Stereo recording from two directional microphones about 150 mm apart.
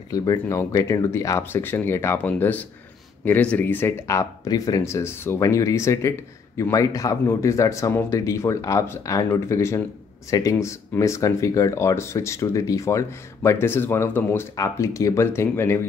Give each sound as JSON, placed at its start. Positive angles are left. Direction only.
{"t": 0.1, "sound": "speech", "side_deg": 25}